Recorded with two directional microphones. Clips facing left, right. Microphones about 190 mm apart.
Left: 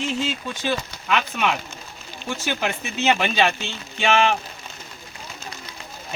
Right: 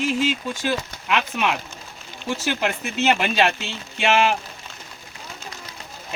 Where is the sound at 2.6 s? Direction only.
5° right (ahead or behind).